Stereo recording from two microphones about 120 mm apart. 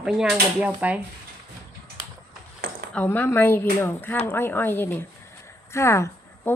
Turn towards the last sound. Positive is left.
turn(degrees=25)  # may be behind; listen again after turning